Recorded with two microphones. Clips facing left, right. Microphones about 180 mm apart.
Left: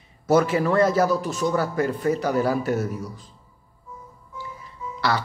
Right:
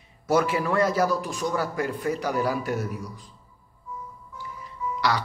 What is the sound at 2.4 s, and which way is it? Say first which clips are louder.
Speech: left 4 dB; 10° right (ahead or behind).